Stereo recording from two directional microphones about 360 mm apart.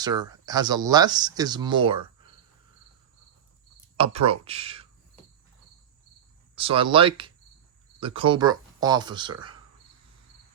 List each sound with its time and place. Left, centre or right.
0.0 s speech: centre
3.9 s speech: centre
6.6 s speech: centre